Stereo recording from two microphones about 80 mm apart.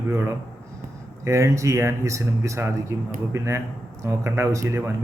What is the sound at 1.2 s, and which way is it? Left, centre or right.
A man's voice, right.